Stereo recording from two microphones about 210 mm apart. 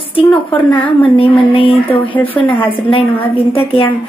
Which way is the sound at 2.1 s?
5° left (ahead or behind).